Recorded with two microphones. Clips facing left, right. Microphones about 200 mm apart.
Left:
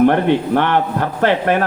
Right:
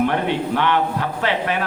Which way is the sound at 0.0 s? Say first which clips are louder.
Left 7 dB; 50° left (ahead or behind).